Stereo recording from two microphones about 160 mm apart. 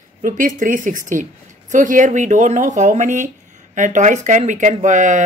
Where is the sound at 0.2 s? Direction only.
55° right (ahead or behind).